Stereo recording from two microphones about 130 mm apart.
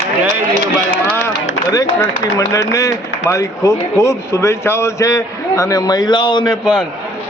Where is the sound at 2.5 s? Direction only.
25° left (ahead or behind).